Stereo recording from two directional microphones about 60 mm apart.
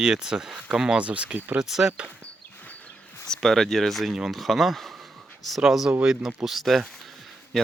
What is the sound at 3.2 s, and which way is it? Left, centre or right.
Speech, centre.